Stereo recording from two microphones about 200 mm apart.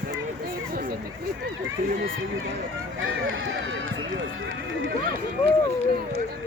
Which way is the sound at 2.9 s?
80° right.